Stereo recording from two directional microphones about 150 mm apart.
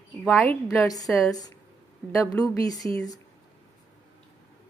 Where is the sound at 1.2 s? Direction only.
25° left (ahead or behind).